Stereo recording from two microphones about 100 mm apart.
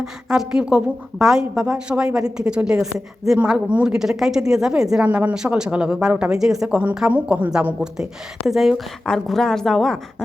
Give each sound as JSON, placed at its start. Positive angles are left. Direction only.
{"t": 0.0, "sound": "speech", "side_deg": -5}